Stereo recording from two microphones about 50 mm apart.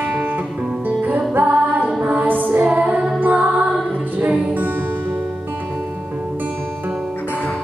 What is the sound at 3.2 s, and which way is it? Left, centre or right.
Music, right.